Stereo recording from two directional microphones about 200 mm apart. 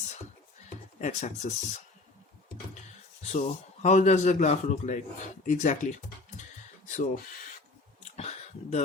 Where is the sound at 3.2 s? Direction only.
35° left (ahead or behind).